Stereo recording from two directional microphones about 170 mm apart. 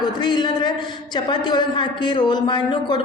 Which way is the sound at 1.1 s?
25° left (ahead or behind).